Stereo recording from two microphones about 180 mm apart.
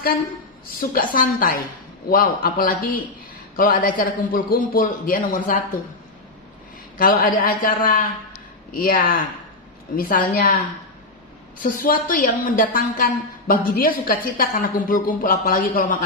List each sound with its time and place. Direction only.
0.9 s a woman's voice: 50° left (ahead or behind)
7.0 s a woman's voice: 50° left (ahead or behind)
11.6 s a woman's voice: 50° left (ahead or behind)